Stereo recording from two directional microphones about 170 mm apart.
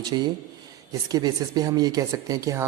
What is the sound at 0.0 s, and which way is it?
Speech, 25° right (ahead or behind).